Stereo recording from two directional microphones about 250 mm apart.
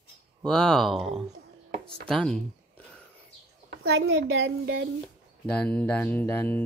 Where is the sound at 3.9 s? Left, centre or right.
Right.